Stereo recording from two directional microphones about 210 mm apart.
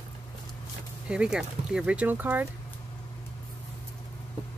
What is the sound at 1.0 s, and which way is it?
Speech, 5° right (ahead or behind).